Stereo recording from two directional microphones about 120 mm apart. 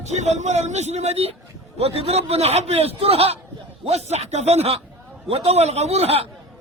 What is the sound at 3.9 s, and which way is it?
A man's voice, 65° right (ahead or behind).